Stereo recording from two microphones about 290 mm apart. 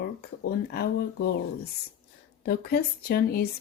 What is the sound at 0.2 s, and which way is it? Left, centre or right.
Speech, left.